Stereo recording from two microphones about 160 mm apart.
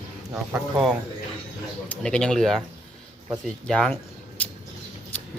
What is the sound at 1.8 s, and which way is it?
Speech, 10° left (ahead or behind).